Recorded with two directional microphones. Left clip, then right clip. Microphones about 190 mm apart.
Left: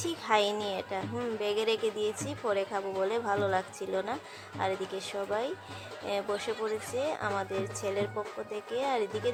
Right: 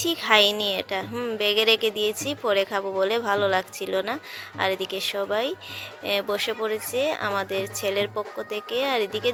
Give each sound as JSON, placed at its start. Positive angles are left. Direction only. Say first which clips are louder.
{"t": 0.0, "sound": "speech", "louder": "right 9 dB", "side_deg": -25}